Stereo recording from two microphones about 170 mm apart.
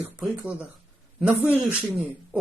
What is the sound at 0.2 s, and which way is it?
Speech, 5° right (ahead or behind).